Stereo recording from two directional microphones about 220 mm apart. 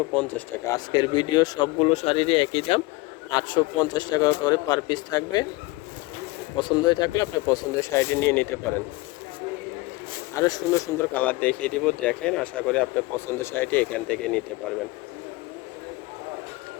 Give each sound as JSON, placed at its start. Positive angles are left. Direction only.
{"t": 0.1, "sound": "speech", "side_deg": 5}
{"t": 0.9, "sound": "speech", "side_deg": 20}
{"t": 6.6, "sound": "speech", "side_deg": 20}
{"t": 10.3, "sound": "speech", "side_deg": 15}